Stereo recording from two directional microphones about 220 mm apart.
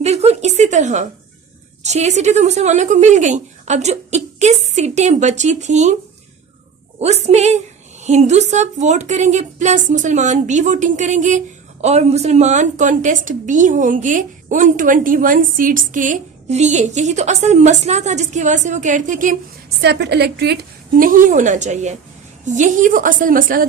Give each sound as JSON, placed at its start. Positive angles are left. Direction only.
{"t": 0.0, "sound": "a sound", "side_deg": -30}
{"t": 1.8, "sound": "a woman's voice", "side_deg": -30}
{"t": 7.0, "sound": "a woman's voice", "side_deg": -30}
{"t": 19.8, "sound": "a woman's voice", "side_deg": -50}